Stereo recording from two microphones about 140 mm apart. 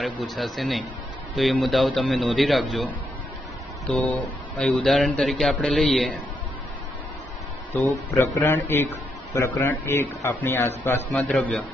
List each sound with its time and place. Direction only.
0.0 s a man's voice: centre (ahead or behind)
3.9 s a man's voice: 10° left (ahead or behind)
8.1 s a man's voice: 20° left (ahead or behind)
11.1 s a man's voice: centre (ahead or behind)